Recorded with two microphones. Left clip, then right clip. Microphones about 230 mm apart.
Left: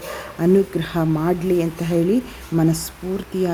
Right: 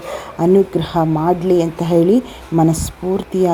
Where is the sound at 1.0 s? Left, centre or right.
Centre.